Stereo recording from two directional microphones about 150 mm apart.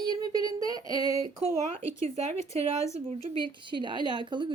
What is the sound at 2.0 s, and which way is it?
Speech, 45° right (ahead or behind).